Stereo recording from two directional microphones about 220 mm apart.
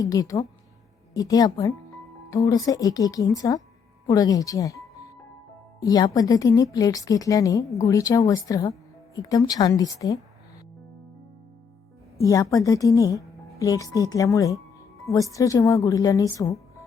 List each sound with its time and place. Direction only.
0.0 s speech: 15° left (ahead or behind)
5.8 s speech: 15° left (ahead or behind)
12.1 s speech: 15° left (ahead or behind)